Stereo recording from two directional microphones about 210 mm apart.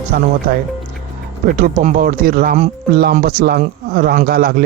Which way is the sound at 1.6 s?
40° right (ahead or behind).